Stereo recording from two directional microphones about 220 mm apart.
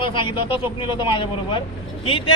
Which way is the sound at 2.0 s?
25° left (ahead or behind).